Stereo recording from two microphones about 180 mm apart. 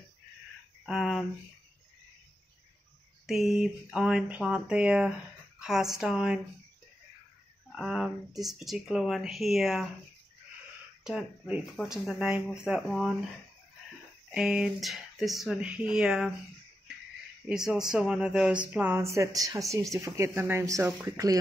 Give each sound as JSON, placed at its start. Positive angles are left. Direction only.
{"t": 0.8, "sound": "speech", "side_deg": 0}
{"t": 3.3, "sound": "speech", "side_deg": 0}
{"t": 7.7, "sound": "speech", "side_deg": 0}
{"t": 11.1, "sound": "speech", "side_deg": -5}
{"t": 14.3, "sound": "speech", "side_deg": -5}
{"t": 17.5, "sound": "speech", "side_deg": -5}